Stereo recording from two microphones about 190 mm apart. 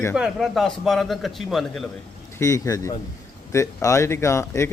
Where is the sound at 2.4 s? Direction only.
15° left (ahead or behind).